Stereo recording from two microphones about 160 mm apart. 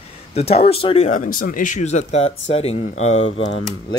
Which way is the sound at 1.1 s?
60° left (ahead or behind).